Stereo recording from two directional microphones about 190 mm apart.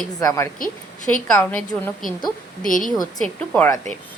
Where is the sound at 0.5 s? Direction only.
45° left (ahead or behind).